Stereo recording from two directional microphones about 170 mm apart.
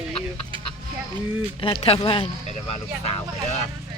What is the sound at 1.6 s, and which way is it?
Speech, 35° left (ahead or behind).